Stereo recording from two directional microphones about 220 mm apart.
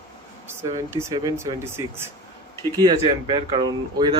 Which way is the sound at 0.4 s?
10° right (ahead or behind).